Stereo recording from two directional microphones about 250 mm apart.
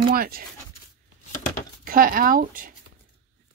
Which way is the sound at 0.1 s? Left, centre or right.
Right.